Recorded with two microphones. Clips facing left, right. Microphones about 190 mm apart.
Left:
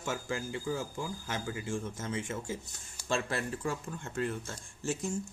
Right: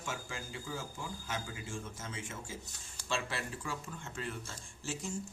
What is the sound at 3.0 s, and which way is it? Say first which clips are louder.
Speech: left 5 dB; 45° left (ahead or behind).